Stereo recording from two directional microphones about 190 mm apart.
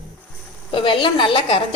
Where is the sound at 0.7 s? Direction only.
25° left (ahead or behind).